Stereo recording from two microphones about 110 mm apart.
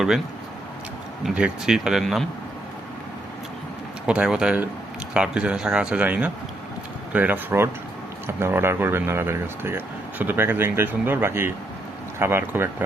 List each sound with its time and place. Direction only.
1.2 s speech: 5° right (ahead or behind)
4.0 s speech: 10° right (ahead or behind)